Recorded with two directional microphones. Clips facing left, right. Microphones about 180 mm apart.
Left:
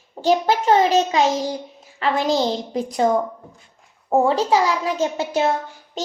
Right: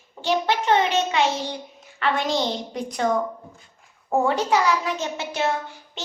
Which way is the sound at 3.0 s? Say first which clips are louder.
Left 3 dB; 25° left (ahead or behind).